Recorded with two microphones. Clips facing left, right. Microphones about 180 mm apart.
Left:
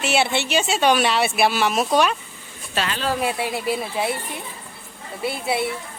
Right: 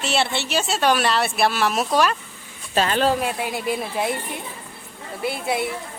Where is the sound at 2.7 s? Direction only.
40° right (ahead or behind).